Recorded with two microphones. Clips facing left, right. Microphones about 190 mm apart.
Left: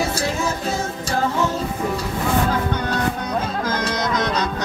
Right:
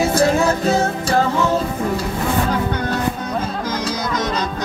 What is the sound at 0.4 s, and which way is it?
Music, 70° right (ahead or behind).